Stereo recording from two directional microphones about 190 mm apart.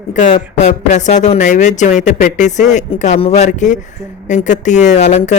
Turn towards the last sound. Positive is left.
turn(degrees=35)  # may be behind; listen again after turning